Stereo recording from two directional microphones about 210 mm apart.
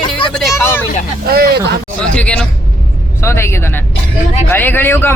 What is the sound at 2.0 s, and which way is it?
A man's voice, 5° left (ahead or behind).